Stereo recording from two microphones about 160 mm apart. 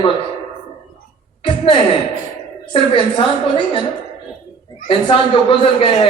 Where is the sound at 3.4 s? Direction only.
30° left (ahead or behind).